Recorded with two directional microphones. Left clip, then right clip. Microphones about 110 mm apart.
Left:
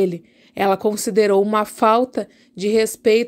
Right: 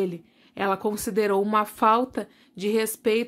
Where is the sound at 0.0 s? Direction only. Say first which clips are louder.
Left 8 dB; 45° left (ahead or behind).